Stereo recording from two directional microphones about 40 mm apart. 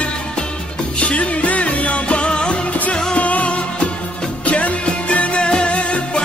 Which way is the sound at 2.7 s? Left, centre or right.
Left.